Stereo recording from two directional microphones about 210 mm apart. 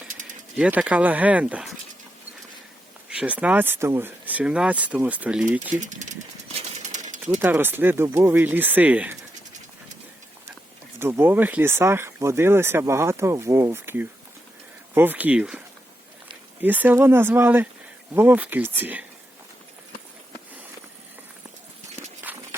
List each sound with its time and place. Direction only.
0.5 s speech: 5° right (ahead or behind)
3.1 s speech: 5° right (ahead or behind)
5.7 s speech: 35° right (ahead or behind)
6.6 s pigeon: 35° right (ahead or behind)
7.3 s speech: 10° right (ahead or behind)
11.0 s speech: 10° right (ahead or behind)
22.3 s walk: 10° right (ahead or behind)